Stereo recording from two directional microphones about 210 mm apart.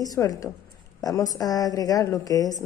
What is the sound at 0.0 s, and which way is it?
A woman's voice, 15° left (ahead or behind).